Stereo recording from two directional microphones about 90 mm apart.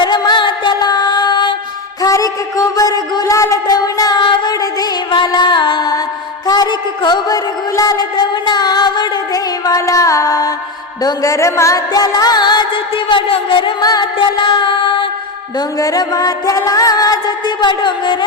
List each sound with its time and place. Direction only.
0.0 s music: 55° left (ahead or behind)
2.0 s music: 40° left (ahead or behind); by 13.7 s 70° left (ahead or behind)
13.8 s music: 50° left (ahead or behind)
15.5 s music: 45° left (ahead or behind); by 18.3 s 60° left (ahead or behind)